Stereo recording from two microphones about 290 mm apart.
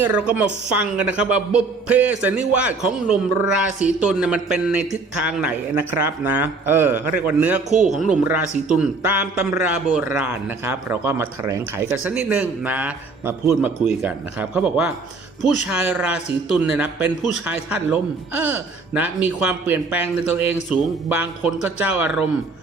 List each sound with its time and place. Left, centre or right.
0.0 s a man's voice: centre